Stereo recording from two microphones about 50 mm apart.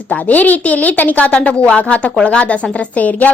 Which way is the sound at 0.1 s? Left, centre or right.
Left.